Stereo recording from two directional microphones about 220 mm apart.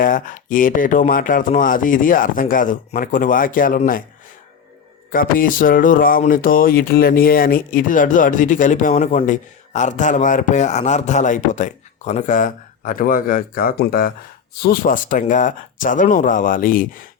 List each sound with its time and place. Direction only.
0.0 s speech: 35° left (ahead or behind)
5.1 s speech: 40° left (ahead or behind)